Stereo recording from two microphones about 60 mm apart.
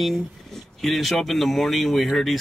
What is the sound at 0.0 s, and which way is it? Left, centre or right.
Speech, centre.